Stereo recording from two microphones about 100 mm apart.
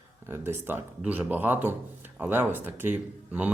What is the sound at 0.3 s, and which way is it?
Speech, 25° right (ahead or behind).